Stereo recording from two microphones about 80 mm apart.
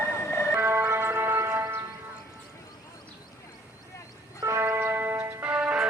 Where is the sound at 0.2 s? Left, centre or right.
Left.